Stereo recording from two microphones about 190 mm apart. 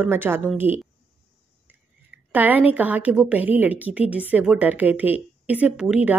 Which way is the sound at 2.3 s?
10° right (ahead or behind).